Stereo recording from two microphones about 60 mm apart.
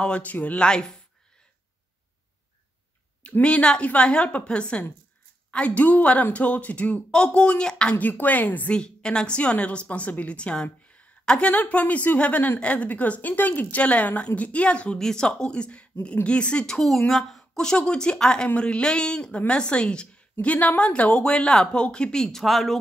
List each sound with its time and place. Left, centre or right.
0.0 s a woman's voice: left
0.7 s speech: centre
3.3 s a woman's voice: left
8.0 s a woman's voice: left
8.7 s a woman's voice: centre
22.4 s speech: centre